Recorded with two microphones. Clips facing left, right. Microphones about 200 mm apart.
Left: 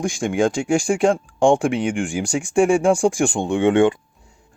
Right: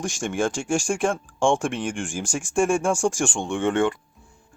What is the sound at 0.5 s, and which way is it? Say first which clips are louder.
Speech: left 5 dB; 60° left (ahead or behind).